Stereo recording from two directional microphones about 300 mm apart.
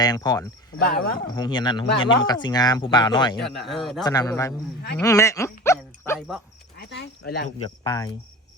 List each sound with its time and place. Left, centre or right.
0.0 s speech: centre
0.8 s speech: left
1.4 s speech: centre
3.3 s a man's voice: centre
4.0 s speech: centre
4.9 s dog: centre
6.7 s speech: left
7.9 s speech: centre